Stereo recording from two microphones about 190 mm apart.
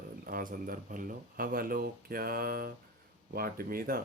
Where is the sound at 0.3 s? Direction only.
50° right (ahead or behind).